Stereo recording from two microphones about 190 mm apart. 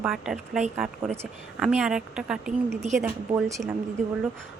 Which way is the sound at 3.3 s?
20° right (ahead or behind).